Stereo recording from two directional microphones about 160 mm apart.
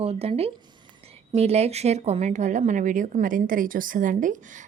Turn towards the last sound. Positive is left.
turn(degrees=-55)  # may be behind; listen again after turning